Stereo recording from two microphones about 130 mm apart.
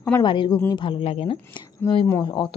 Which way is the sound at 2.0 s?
25° left (ahead or behind).